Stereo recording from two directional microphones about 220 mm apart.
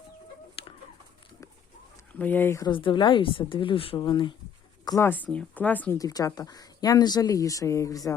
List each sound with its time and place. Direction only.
0.6 s chicken: 25° left (ahead or behind)
2.1 s speech: 10° left (ahead or behind)